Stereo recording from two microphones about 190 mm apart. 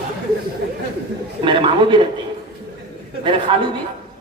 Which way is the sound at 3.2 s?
25° right (ahead or behind).